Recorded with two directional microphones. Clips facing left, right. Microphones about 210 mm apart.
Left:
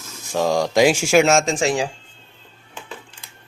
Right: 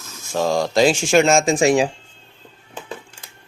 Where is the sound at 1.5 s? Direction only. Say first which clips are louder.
Right 5 dB; 20° right (ahead or behind).